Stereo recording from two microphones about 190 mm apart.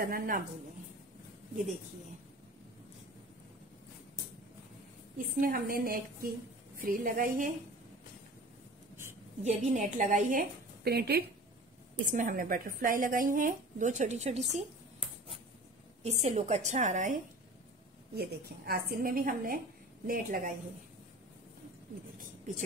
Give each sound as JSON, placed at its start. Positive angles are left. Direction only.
{"t": 0.0, "sound": "a woman's voice", "side_deg": -50}
{"t": 5.1, "sound": "a woman's voice", "side_deg": -45}
{"t": 9.4, "sound": "a woman's voice", "side_deg": -40}
{"t": 10.8, "sound": "speech", "side_deg": -55}
{"t": 12.1, "sound": "a woman's voice", "side_deg": -45}
{"t": 16.0, "sound": "a woman's voice", "side_deg": -35}
{"t": 18.1, "sound": "a woman's voice", "side_deg": -55}